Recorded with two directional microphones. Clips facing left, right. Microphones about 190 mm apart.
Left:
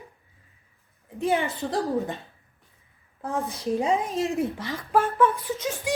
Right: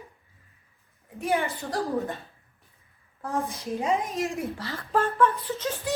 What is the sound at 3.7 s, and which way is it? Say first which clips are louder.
Speech: left 2 dB; 30° left (ahead or behind).